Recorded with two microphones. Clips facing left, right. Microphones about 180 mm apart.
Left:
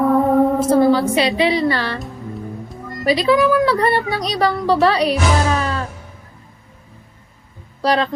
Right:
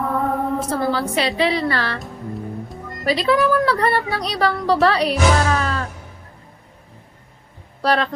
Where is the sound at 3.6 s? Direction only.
20° left (ahead or behind).